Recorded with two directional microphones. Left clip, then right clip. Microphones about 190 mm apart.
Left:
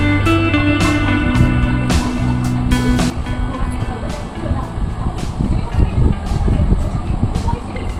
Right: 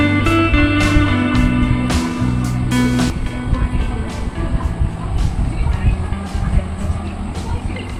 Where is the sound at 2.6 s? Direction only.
Centre (ahead or behind).